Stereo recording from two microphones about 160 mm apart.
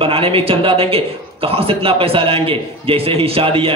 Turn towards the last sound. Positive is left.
turn(degrees=-35)  # may be behind; listen again after turning